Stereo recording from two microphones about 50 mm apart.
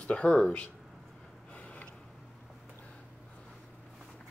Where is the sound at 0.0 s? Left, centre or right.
Left.